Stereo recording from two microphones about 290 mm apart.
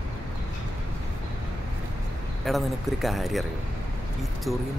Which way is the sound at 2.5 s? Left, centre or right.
Centre.